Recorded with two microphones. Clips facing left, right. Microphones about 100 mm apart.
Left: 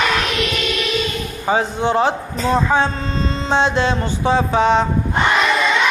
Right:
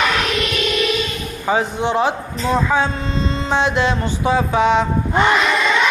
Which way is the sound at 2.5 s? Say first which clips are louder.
Left 1 dB; 30° left (ahead or behind).